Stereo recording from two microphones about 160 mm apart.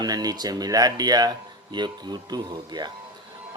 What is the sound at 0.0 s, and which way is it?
A man's voice, 25° right (ahead or behind).